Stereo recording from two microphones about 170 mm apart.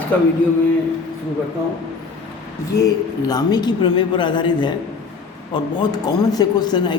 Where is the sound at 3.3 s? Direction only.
25° left (ahead or behind).